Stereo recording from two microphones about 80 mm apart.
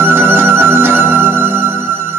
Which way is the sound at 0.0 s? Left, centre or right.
Right.